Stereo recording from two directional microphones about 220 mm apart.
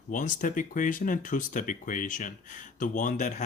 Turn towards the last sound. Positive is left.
turn(degrees=35)  # may be behind; listen again after turning